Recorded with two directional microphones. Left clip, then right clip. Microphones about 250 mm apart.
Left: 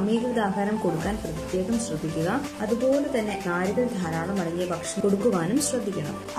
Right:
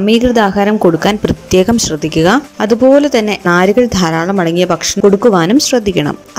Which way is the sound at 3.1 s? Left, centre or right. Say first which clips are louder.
Right 15 dB; right.